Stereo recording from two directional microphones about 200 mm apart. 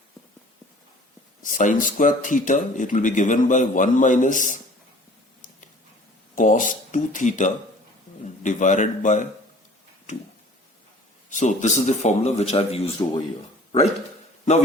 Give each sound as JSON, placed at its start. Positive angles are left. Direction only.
{"t": 1.4, "sound": "speech", "side_deg": 40}
{"t": 6.3, "sound": "speech", "side_deg": 40}
{"t": 11.3, "sound": "speech", "side_deg": 35}